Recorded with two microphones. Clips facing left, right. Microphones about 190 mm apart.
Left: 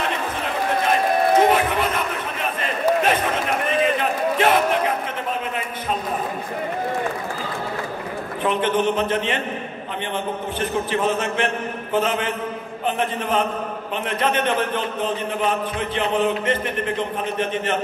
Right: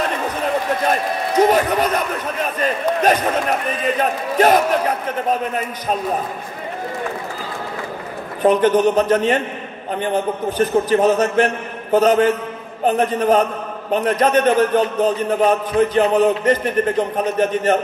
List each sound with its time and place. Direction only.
1.4 s a man's voice: 40° right (ahead or behind)
2.6 s basketball bounce: 40° right (ahead or behind)
4.0 s a sound: 40° right (ahead or behind)
8.4 s a man's voice: 40° right (ahead or behind)